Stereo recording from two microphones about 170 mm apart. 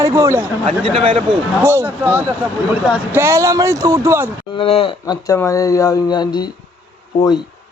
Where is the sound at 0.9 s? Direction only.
35° right (ahead or behind).